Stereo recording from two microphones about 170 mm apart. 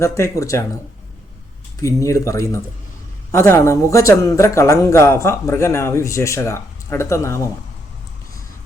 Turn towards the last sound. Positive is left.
turn(degrees=15)  # may be behind; listen again after turning